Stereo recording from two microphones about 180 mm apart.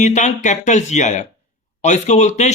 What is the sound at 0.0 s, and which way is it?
Speech, 40° left (ahead or behind).